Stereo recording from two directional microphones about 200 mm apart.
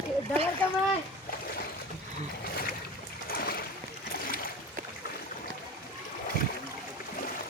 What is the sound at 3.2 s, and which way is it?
Boat, 50° left (ahead or behind).